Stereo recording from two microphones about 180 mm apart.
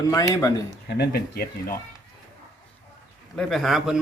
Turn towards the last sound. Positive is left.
turn(degrees=0)  # may be behind; listen again after turning